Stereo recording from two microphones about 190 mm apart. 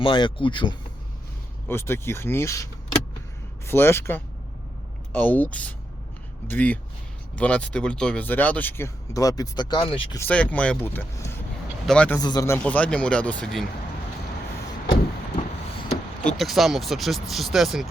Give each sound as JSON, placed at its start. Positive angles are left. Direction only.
{"t": 0.0, "sound": "speech", "side_deg": 25}
{"t": 1.6, "sound": "speech", "side_deg": 15}
{"t": 10.2, "sound": "speech", "side_deg": 5}
{"t": 12.2, "sound": "speech", "side_deg": 20}
{"t": 16.2, "sound": "speech", "side_deg": 0}